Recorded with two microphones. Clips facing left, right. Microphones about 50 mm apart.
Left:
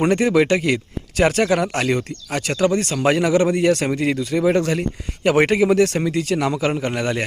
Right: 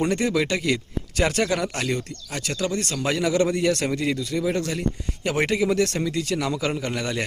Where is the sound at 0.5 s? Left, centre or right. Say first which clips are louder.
Left 5 dB; left.